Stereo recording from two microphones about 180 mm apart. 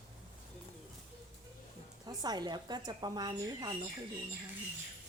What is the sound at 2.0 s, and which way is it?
A woman's voice, 20° right (ahead or behind).